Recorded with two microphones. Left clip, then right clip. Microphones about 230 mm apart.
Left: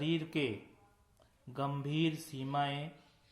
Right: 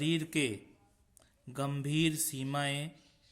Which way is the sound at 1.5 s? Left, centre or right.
Right.